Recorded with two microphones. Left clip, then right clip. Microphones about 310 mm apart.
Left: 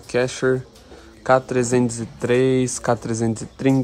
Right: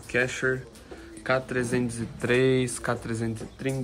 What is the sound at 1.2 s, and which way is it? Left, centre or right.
Speech, centre.